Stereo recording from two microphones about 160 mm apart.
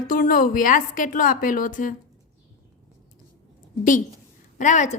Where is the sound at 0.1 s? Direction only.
60° left (ahead or behind).